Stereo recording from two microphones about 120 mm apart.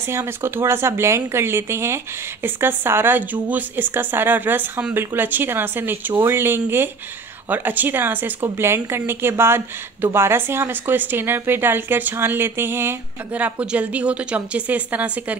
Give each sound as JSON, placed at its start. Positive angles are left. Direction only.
{"t": 0.1, "sound": "speech", "side_deg": -20}